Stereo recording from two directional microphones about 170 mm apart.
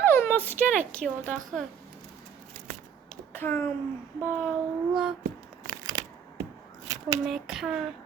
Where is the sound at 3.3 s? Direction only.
10° left (ahead or behind).